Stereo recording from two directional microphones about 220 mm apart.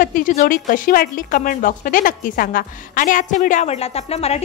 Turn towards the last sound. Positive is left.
turn(degrees=30)  # may be behind; listen again after turning